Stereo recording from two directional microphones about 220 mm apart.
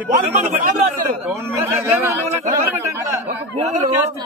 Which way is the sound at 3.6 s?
30° right (ahead or behind).